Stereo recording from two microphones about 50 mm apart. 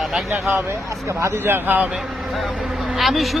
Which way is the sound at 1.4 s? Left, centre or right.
Right.